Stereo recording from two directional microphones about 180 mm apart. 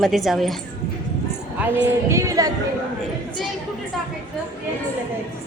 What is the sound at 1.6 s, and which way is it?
Speech, 15° right (ahead or behind).